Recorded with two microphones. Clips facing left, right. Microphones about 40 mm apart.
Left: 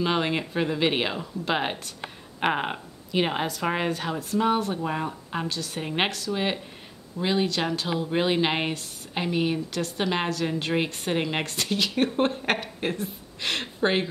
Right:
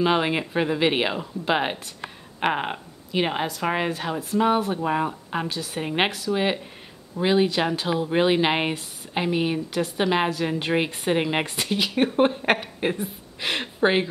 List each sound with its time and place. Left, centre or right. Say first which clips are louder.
0.0 s speech: right 3 dB; centre